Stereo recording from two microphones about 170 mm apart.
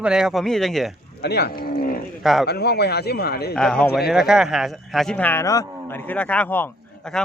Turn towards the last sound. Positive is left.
turn(degrees=10)  # may be behind; listen again after turning